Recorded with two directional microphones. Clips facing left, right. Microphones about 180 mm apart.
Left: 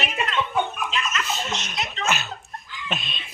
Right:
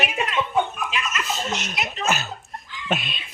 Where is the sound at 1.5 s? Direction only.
5° right (ahead or behind).